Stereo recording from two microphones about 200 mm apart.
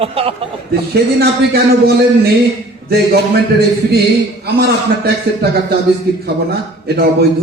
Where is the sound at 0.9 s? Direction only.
50° right (ahead or behind).